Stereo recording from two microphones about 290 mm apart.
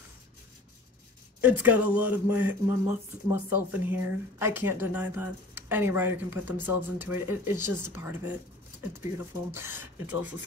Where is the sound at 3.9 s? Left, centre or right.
Centre.